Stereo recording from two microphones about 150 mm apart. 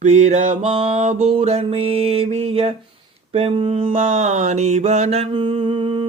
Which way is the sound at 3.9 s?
50° right (ahead or behind).